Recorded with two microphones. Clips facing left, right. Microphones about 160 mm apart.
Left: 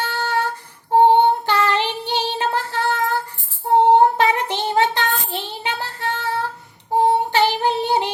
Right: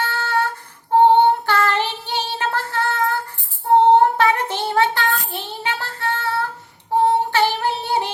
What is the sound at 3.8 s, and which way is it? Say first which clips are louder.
Child singing: left 2 dB; 15° left (ahead or behind).